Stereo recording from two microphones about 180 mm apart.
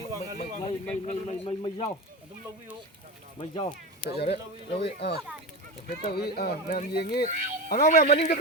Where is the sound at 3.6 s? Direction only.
30° left (ahead or behind).